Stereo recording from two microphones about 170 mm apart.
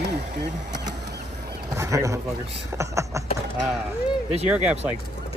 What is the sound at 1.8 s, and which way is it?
Bird, 15° right (ahead or behind).